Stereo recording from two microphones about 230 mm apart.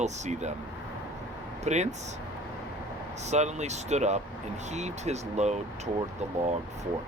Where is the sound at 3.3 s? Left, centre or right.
Right.